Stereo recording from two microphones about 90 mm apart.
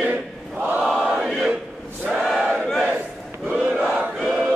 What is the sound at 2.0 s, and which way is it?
Battle cry, centre (ahead or behind).